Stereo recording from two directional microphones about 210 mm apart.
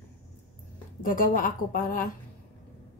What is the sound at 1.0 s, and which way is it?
A woman's voice, 40° left (ahead or behind).